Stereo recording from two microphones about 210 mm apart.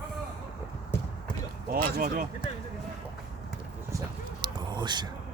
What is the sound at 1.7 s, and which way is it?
Speech, 45° right (ahead or behind).